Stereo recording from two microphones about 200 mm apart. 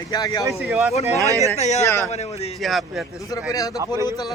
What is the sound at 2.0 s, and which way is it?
Speech, 35° left (ahead or behind).